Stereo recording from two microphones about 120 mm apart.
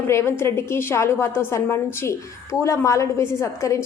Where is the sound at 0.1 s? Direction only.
20° left (ahead or behind).